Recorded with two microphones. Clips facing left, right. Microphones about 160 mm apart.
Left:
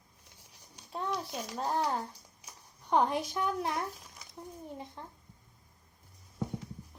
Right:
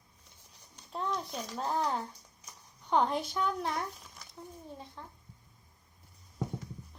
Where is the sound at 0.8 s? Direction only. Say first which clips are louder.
Even; 5° left (ahead or behind).